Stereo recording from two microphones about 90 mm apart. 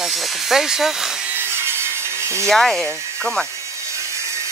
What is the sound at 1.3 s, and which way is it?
Sawing, 30° right (ahead or behind).